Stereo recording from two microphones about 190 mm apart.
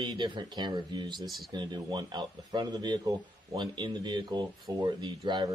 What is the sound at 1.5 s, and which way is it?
Speech, 20° right (ahead or behind).